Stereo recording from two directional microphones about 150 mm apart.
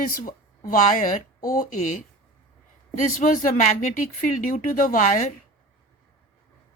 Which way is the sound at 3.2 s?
60° left (ahead or behind).